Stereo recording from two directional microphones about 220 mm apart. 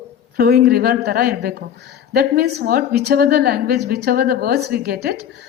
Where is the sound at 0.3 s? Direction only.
45° right (ahead or behind).